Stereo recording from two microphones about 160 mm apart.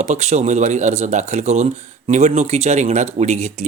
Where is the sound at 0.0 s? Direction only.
45° right (ahead or behind).